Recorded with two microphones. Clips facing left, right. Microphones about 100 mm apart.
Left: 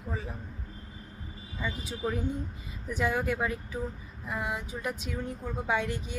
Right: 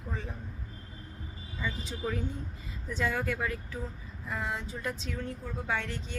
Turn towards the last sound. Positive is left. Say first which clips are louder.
# left 4 dB
turn(degrees=15)  # may be behind; listen again after turning